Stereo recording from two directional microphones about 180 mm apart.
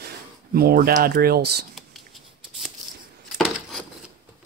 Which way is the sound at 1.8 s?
Centre (ahead or behind).